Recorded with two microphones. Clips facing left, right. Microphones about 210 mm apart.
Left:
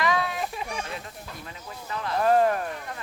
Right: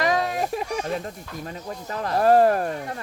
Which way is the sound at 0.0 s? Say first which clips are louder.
Right 3 dB; 40° right (ahead or behind).